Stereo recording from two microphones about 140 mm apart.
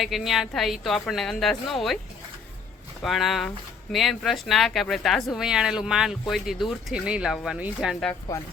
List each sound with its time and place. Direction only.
0.0 s speech: centre (ahead or behind)
3.0 s speech: centre (ahead or behind)